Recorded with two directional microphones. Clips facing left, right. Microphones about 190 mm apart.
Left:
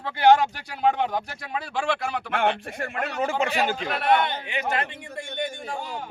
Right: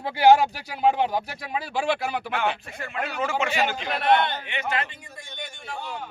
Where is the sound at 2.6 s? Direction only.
50° left (ahead or behind).